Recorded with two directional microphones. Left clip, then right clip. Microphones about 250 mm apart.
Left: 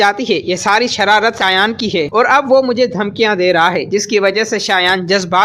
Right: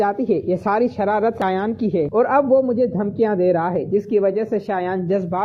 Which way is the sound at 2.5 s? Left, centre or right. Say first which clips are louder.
Left 5 dB; left.